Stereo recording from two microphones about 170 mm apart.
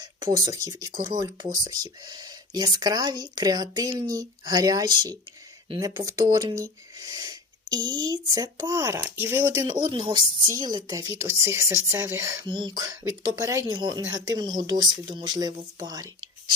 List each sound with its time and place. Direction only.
0.3 s speech: 20° right (ahead or behind)
9.8 s speech: 30° right (ahead or behind)